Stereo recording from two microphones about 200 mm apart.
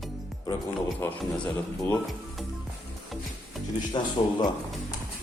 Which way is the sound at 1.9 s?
Centre (ahead or behind).